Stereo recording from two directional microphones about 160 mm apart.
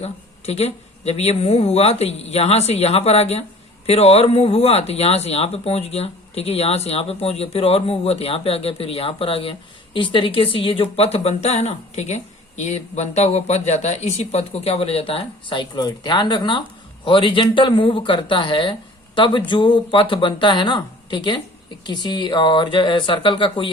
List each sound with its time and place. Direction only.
0.0 s speech: 40° left (ahead or behind)